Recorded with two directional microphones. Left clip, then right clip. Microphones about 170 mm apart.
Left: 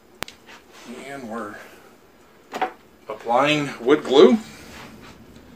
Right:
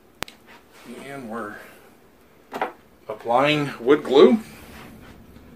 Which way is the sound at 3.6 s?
15° right (ahead or behind).